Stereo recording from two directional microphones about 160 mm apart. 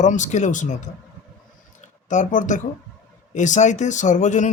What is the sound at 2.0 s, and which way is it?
Speech, 50° left (ahead or behind).